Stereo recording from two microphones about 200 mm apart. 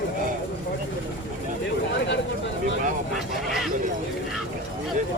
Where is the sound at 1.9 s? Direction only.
65° left (ahead or behind).